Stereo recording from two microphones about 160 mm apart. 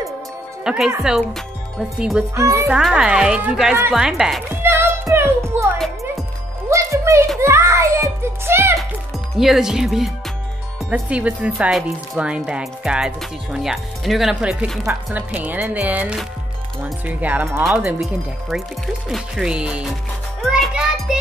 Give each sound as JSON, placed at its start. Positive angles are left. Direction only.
{"t": 0.7, "sound": "speech", "side_deg": -5}
{"t": 2.3, "sound": "speech", "side_deg": -15}
{"t": 2.7, "sound": "speech", "side_deg": -5}
{"t": 4.5, "sound": "music", "side_deg": -15}
{"t": 6.7, "sound": "music", "side_deg": -20}
{"t": 7.3, "sound": "a child's voice", "side_deg": -15}
{"t": 9.4, "sound": "speech", "side_deg": -5}
{"t": 19.0, "sound": "a child's voice", "side_deg": -5}